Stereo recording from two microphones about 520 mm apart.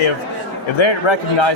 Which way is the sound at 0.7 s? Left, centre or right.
Left.